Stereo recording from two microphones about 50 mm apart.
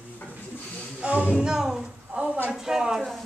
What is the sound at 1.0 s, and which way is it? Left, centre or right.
Speech, right.